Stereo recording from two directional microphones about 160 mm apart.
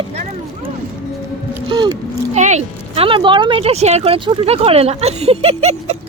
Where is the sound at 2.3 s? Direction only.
45° right (ahead or behind).